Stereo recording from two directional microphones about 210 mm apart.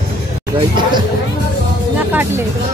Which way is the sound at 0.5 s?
20° right (ahead or behind).